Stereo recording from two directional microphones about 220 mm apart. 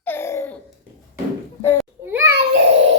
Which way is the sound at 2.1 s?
10° right (ahead or behind).